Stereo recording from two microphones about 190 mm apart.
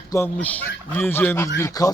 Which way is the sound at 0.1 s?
10° left (ahead or behind).